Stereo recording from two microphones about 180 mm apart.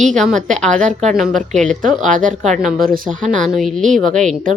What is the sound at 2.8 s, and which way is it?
Speech, 50° right (ahead or behind).